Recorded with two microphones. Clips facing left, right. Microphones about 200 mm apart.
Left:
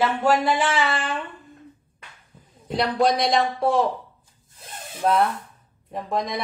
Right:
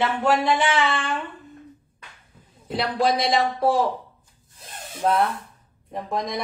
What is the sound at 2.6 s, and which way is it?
A woman's voice, centre (ahead or behind).